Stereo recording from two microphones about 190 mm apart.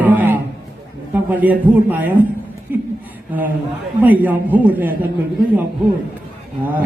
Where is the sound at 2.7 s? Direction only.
10° right (ahead or behind).